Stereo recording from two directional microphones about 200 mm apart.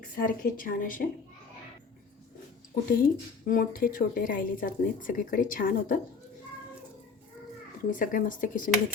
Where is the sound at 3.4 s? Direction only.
45° left (ahead or behind).